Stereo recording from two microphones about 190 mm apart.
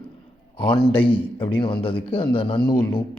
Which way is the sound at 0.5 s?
25° left (ahead or behind).